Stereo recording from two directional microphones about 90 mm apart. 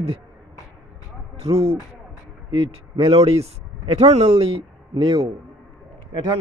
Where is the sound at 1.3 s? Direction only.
90° right.